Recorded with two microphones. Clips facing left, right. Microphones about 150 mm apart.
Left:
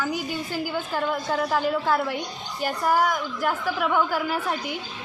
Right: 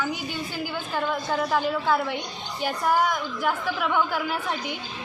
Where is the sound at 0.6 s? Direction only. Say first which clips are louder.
Even; 5° left (ahead or behind).